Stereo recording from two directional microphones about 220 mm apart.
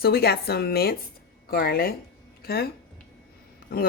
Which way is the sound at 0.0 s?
45° left (ahead or behind).